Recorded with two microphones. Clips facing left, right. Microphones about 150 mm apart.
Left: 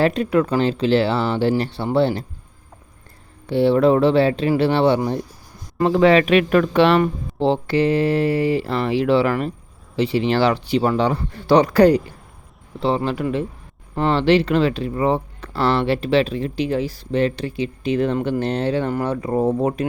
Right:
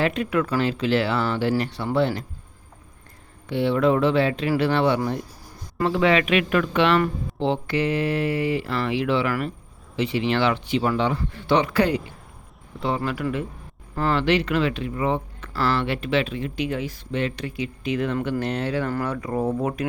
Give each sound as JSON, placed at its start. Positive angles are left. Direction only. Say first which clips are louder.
{"t": 0.0, "sound": "speech", "louder": "left 5 dB", "side_deg": 35}
{"t": 3.5, "sound": "speech", "louder": "left 5 dB", "side_deg": 35}
{"t": 12.8, "sound": "speech", "louder": "left 5 dB", "side_deg": 30}